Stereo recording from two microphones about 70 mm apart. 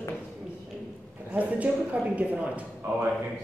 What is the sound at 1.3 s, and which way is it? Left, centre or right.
A man's voice, right.